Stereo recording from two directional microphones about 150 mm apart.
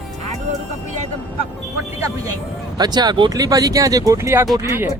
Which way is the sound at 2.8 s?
25° right (ahead or behind).